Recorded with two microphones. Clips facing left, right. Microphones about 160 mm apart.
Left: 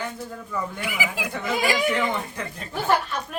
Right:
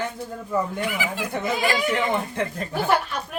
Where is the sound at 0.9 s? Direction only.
10° left (ahead or behind).